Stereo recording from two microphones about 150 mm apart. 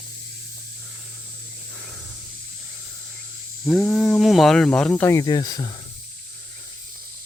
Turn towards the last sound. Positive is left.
turn(degrees=25)  # may be behind; listen again after turning